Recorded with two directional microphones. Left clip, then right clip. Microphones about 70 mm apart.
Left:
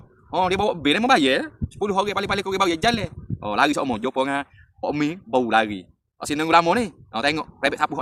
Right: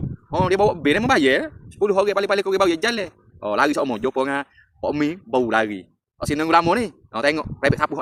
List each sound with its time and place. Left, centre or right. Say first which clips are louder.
0.3 s speech: right 3 dB; left